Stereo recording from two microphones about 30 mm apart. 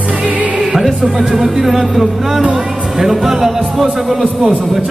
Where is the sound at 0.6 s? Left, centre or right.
Centre.